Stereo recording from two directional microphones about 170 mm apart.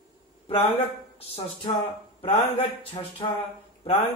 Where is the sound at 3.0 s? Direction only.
30° left (ahead or behind).